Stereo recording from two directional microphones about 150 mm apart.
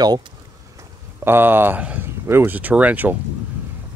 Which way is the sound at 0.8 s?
15° right (ahead or behind).